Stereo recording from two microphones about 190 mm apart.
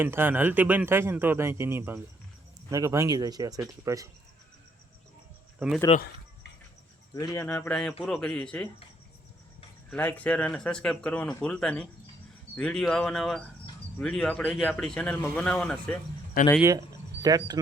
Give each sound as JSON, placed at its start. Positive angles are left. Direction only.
{"t": 0.0, "sound": "a man's voice", "side_deg": -10}
{"t": 5.5, "sound": "speech", "side_deg": -5}
{"t": 7.1, "sound": "speech", "side_deg": 20}
{"t": 9.9, "sound": "speech", "side_deg": 10}
{"t": 16.6, "sound": "speech", "side_deg": -15}